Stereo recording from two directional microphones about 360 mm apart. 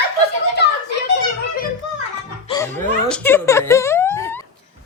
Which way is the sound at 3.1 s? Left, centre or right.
Centre.